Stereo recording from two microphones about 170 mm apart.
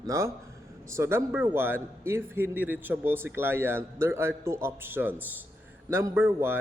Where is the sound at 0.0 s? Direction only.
15° right (ahead or behind).